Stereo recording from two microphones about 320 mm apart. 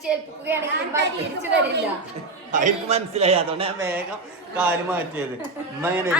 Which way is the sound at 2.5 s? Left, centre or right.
Right.